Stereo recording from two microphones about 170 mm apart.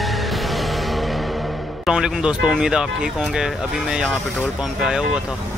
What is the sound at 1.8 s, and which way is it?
Speech, 5° right (ahead or behind).